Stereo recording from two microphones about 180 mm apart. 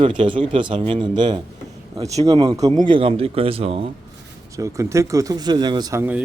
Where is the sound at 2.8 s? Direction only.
30° right (ahead or behind).